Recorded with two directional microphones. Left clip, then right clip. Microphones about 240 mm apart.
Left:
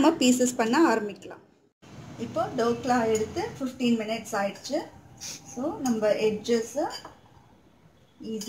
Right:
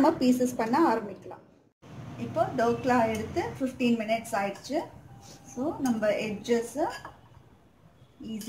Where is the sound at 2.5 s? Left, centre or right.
Left.